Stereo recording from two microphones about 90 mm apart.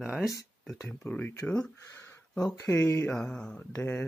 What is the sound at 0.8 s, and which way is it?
Speech, 20° left (ahead or behind).